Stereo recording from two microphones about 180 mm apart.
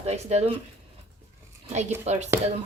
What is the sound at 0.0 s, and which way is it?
Speech, 35° right (ahead or behind).